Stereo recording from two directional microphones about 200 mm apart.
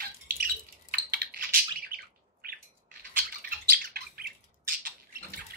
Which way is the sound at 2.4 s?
50° right (ahead or behind).